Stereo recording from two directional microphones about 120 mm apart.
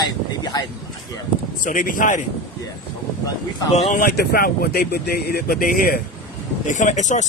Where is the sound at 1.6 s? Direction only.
90° left.